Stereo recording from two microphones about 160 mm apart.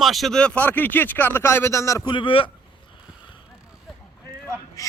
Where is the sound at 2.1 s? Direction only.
35° left (ahead or behind).